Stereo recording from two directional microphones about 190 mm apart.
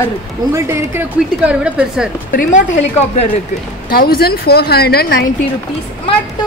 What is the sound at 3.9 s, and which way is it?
A woman's voice, 55° left (ahead or behind).